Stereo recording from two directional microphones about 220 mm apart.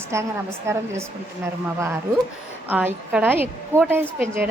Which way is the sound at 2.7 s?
5° right (ahead or behind).